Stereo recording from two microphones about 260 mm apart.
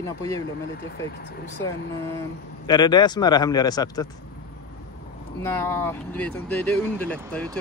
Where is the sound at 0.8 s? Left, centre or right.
Left.